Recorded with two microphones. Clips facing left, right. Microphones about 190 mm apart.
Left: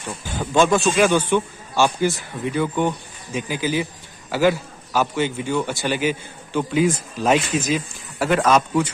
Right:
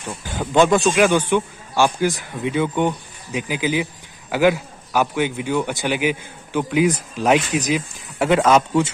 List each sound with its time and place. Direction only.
0.4 s a man's voice: 15° right (ahead or behind)